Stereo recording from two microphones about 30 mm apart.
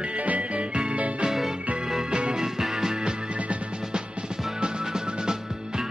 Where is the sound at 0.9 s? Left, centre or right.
Right.